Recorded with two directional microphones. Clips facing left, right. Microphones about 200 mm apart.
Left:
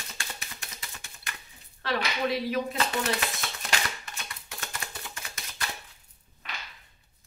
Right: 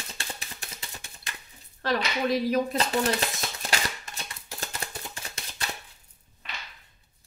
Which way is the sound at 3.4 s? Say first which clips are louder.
Right 2 dB; 35° right (ahead or behind).